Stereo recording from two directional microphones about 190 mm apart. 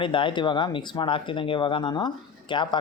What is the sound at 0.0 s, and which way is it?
Speech, 25° left (ahead or behind).